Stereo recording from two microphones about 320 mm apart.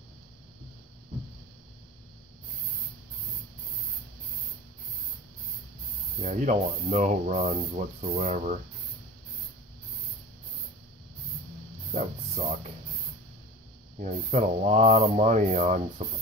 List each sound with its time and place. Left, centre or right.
6.2 s speech: right
11.9 s speech: centre
13.9 s speech: right